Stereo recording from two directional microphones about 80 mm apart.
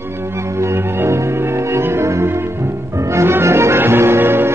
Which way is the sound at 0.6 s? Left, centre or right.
Right.